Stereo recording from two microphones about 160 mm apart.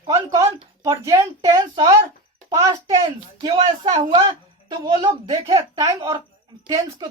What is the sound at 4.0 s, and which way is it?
Speech, 30° right (ahead or behind).